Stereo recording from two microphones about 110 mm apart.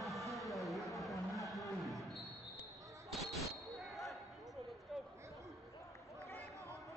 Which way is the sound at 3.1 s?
Centre (ahead or behind).